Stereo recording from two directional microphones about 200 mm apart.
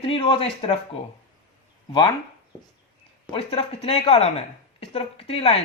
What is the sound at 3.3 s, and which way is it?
A woman's voice, 30° left (ahead or behind).